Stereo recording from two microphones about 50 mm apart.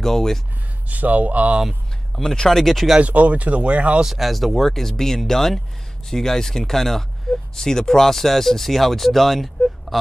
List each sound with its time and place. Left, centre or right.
0.0 s speech: centre
0.8 s speech: right
2.1 s speech: centre
3.0 s speech: right
4.0 s speech: centre